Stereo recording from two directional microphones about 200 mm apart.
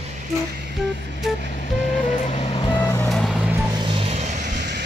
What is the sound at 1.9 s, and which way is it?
Vehicle, 35° left (ahead or behind).